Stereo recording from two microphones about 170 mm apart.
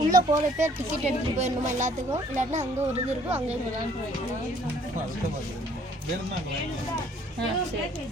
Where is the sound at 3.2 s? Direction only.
10° right (ahead or behind).